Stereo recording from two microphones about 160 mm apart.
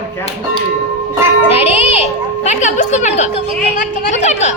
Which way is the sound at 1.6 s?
40° left (ahead or behind).